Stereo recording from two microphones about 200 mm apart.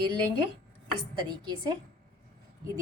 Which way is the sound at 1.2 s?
20° right (ahead or behind).